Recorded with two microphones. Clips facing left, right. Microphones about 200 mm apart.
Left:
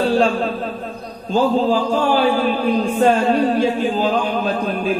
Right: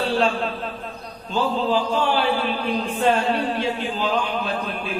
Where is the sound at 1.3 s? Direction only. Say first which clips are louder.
Left 6 dB; 45° left (ahead or behind).